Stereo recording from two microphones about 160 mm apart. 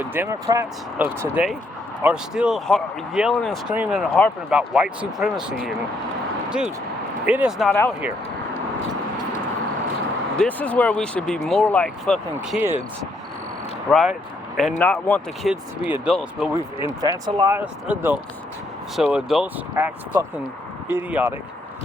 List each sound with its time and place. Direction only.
0.0 s speech: 15° right (ahead or behind)
0.9 s speech: 10° right (ahead or behind)
7.3 s speech: 10° right (ahead or behind)
7.7 s speech: 10° left (ahead or behind)
10.3 s speech: 5° left (ahead or behind)
12.5 s speech: 10° right (ahead or behind)
13.9 s speech: centre (ahead or behind)
14.8 s speech: 10° left (ahead or behind)
15.4 s speech: 5° right (ahead or behind)
17.0 s speech: 25° right (ahead or behind)
17.5 s speech: 10° right (ahead or behind)